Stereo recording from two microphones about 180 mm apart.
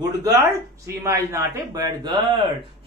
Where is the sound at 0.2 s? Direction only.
15° right (ahead or behind).